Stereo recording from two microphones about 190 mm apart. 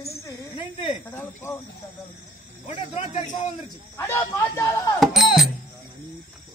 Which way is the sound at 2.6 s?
35° left (ahead or behind).